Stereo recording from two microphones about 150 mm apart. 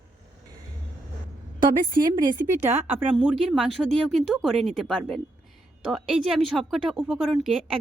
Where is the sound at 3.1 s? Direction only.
Centre (ahead or behind).